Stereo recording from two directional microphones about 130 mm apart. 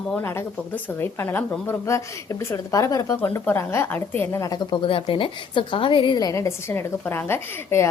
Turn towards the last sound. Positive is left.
turn(degrees=20)  # may be behind; listen again after turning